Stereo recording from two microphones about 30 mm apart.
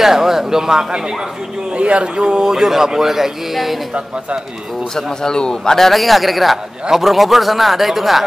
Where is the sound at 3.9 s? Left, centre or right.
Right.